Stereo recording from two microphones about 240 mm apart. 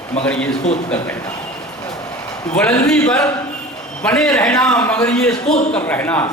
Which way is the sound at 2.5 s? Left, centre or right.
Centre.